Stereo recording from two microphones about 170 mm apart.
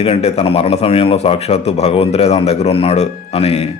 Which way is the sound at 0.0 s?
35° left (ahead or behind).